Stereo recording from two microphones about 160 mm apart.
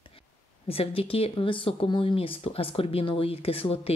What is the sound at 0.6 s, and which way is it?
Speech, 35° left (ahead or behind).